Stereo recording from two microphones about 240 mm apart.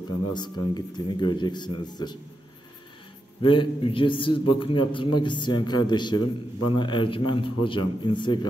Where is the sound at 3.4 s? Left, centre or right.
Left.